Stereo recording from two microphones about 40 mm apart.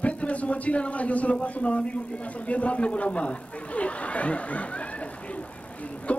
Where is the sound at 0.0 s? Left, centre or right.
Left.